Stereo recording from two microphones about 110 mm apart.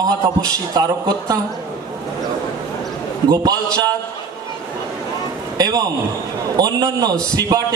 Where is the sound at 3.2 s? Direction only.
35° right (ahead or behind).